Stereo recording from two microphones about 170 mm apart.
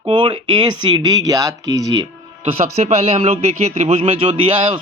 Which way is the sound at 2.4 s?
40° right (ahead or behind).